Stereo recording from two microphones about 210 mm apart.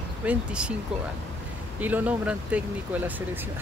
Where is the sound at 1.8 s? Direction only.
10° right (ahead or behind).